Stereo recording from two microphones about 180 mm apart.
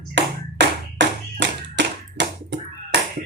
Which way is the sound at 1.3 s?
75° right (ahead or behind).